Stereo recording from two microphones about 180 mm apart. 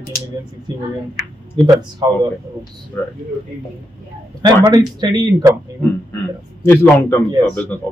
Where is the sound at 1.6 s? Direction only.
25° right (ahead or behind).